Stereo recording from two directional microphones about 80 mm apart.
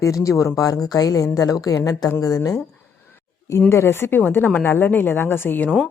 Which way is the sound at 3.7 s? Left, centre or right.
Left.